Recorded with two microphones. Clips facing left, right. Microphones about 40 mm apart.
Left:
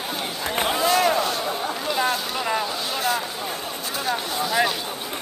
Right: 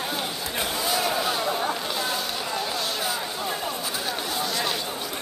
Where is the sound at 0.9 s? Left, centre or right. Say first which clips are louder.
Left 5 dB; centre.